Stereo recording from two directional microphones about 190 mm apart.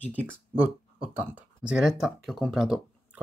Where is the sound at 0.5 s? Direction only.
10° right (ahead or behind).